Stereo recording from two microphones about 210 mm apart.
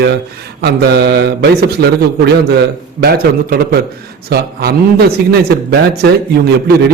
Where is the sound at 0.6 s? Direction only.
50° right (ahead or behind).